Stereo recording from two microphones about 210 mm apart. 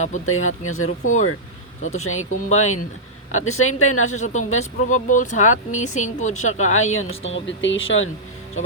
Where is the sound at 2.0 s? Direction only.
80° left.